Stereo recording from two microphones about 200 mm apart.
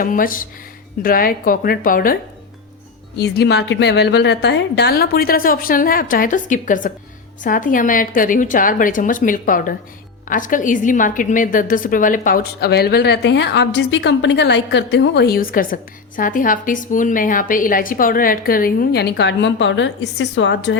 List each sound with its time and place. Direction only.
0.0 s a woman's voice: 45° left (ahead or behind)
3.2 s a woman's voice: 55° left (ahead or behind)